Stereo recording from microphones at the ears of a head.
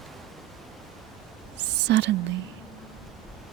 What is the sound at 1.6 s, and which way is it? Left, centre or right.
Whispering, right.